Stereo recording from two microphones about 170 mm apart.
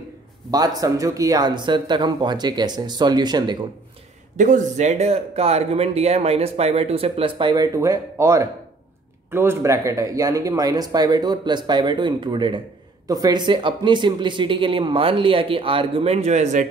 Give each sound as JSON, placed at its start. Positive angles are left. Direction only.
{"t": 0.5, "sound": "speech", "side_deg": -20}
{"t": 4.4, "sound": "speech", "side_deg": -50}